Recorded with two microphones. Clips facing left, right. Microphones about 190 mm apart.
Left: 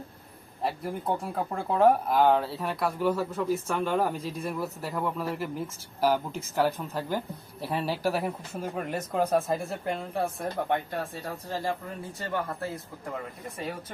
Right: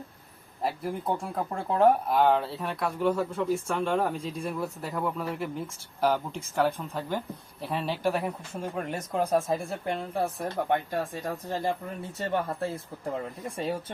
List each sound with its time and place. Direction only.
0.6 s speech: centre (ahead or behind)
11.2 s speech: 15° right (ahead or behind)